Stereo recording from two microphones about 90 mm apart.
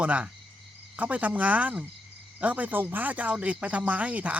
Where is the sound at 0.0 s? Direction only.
15° right (ahead or behind).